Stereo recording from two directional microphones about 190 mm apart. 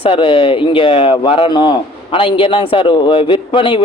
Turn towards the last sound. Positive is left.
turn(degrees=25)  # may be behind; listen again after turning